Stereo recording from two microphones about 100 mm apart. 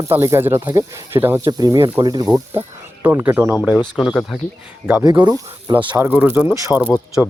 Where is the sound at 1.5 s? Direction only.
40° right (ahead or behind).